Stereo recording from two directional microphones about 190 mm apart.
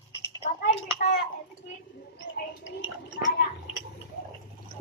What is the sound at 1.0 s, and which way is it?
Speech, 45° left (ahead or behind).